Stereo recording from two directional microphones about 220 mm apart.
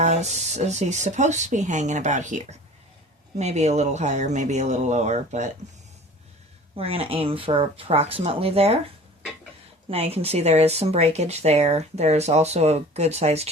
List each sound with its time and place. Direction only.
0.0 s speech: 30° right (ahead or behind)
6.7 s speech: 25° right (ahead or behind)
9.9 s speech: 25° right (ahead or behind)